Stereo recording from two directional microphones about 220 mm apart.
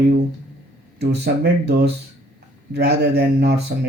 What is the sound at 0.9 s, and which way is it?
Speech, 45° right (ahead or behind).